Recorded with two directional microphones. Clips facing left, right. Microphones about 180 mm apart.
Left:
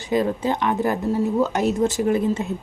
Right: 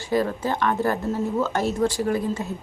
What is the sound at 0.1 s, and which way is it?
Speech, 20° left (ahead or behind).